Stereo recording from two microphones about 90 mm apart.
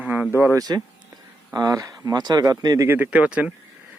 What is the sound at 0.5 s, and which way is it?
Speech, 45° right (ahead or behind).